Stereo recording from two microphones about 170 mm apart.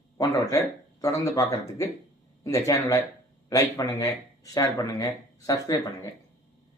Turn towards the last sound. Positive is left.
turn(degrees=20)  # may be behind; listen again after turning